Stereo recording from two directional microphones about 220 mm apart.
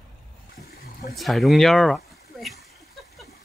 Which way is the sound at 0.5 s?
45° left (ahead or behind).